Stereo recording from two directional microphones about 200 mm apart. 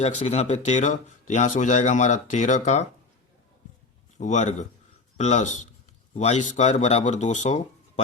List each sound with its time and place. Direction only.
0.0 s speech: 35° left (ahead or behind)
4.2 s speech: 35° left (ahead or behind)